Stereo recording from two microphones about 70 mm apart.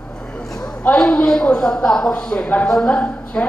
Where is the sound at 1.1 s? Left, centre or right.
Centre.